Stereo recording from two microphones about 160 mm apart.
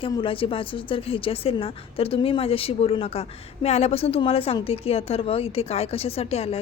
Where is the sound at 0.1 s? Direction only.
35° left (ahead or behind).